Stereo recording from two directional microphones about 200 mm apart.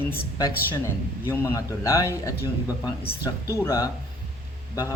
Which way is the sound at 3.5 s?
15° left (ahead or behind).